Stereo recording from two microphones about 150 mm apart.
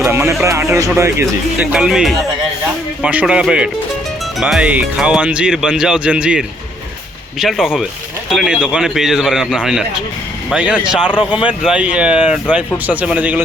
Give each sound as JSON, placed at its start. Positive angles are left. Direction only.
{"t": 0.1, "sound": "music", "side_deg": -15}
{"t": 0.4, "sound": "speech", "side_deg": -20}
{"t": 1.7, "sound": "speech", "side_deg": -5}